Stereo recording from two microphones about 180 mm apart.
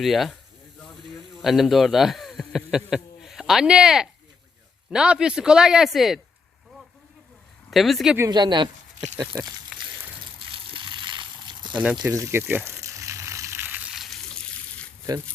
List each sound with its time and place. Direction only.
0.0 s speech: centre (ahead or behind)
1.4 s speech: centre (ahead or behind)
7.7 s speech: centre (ahead or behind)
8.3 s speech: 25° right (ahead or behind)
10.5 s water: 30° right (ahead or behind)
12.0 s a sound: 15° right (ahead or behind); by 14.8 s 5° left (ahead or behind)